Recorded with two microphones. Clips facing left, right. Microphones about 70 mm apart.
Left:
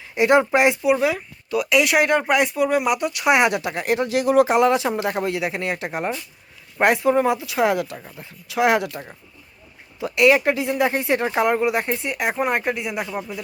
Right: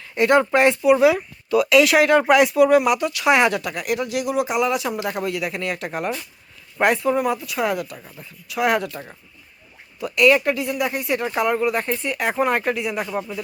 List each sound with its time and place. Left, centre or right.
0.1 s speech: centre
0.8 s speech: centre
3.6 s speech: left
7.1 s speech: left
8.5 s speech: centre
11.9 s speech: centre